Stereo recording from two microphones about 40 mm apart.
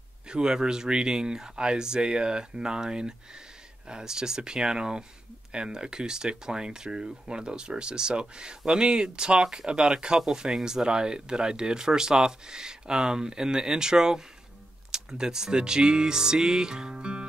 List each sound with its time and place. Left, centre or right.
0.3 s speech: centre